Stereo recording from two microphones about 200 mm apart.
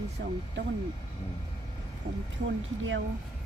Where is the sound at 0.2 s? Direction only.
55° right (ahead or behind).